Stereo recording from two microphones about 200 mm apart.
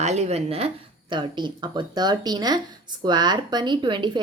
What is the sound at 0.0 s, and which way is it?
A woman's voice, 35° right (ahead or behind).